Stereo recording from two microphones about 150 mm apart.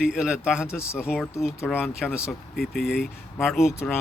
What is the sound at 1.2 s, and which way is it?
Speech, 20° left (ahead or behind).